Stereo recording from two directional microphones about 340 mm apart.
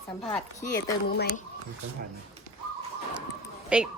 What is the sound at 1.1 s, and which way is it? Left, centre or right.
Speech, left.